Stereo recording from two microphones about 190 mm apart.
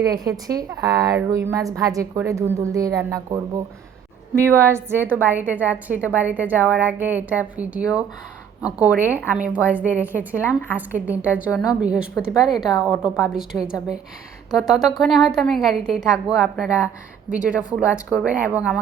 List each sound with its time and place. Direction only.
0.0 s a woman's voice: 20° right (ahead or behind)
9.3 s a woman's voice: 5° right (ahead or behind)